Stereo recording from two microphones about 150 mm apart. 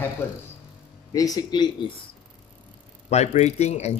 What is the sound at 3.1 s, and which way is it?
Speech, 50° left (ahead or behind).